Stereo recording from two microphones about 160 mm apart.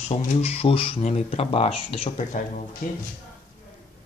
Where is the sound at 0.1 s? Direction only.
40° left (ahead or behind).